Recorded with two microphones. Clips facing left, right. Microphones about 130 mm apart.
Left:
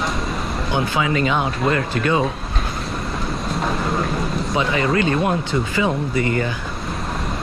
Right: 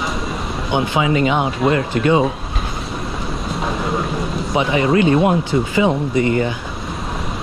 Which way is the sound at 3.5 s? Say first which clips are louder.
Right 1 dB; centre (ahead or behind).